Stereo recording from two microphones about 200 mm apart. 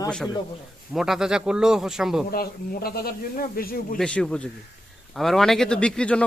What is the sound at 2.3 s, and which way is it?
Speech, 50° left (ahead or behind).